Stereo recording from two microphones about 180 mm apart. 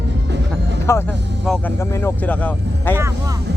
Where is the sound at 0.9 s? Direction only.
15° left (ahead or behind).